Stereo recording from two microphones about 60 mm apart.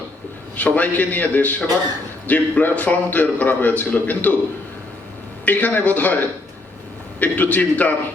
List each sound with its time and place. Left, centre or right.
0.5 s a man's voice: left
5.5 s a man's voice: left